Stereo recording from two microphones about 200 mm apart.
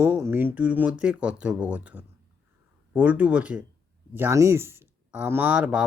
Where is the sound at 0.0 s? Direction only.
10° right (ahead or behind).